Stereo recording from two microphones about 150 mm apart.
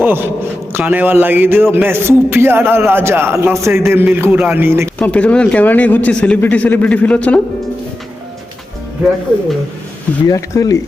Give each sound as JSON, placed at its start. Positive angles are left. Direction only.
{"t": 0.0, "sound": "a man's voice", "side_deg": -15}
{"t": 4.9, "sound": "speech", "side_deg": 10}
{"t": 10.2, "sound": "speech", "side_deg": 20}